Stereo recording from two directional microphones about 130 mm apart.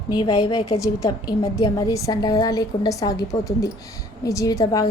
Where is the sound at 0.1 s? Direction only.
35° left (ahead or behind).